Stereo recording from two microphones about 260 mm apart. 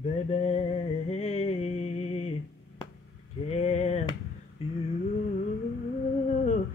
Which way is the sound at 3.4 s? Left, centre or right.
Left.